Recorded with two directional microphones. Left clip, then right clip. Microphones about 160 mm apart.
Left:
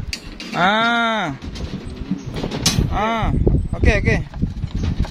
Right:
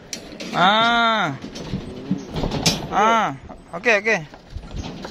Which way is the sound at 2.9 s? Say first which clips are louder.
Right 4 dB; 25° left (ahead or behind).